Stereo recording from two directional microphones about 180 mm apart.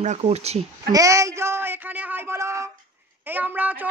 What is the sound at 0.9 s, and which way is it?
A woman's voice, 20° right (ahead or behind).